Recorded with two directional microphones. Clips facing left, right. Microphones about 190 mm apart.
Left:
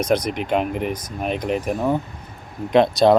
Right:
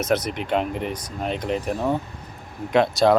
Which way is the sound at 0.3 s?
15° left (ahead or behind).